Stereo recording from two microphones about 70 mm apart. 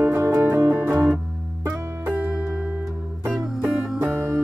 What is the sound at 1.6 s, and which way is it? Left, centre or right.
Music, right.